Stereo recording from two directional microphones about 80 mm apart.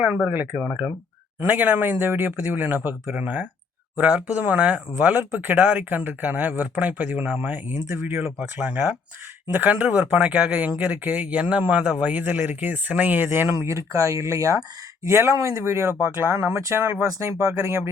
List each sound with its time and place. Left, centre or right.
0.3 s speech: centre
1.5 s speech: right
13.7 s speech: right